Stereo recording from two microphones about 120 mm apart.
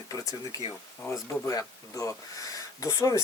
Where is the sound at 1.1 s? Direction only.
25° left (ahead or behind).